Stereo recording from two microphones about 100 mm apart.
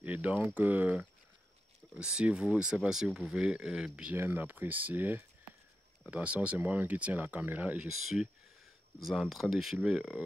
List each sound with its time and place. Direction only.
0.0 s speech: 15° right (ahead or behind)